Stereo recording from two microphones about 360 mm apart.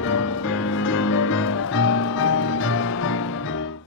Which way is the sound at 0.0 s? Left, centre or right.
Left.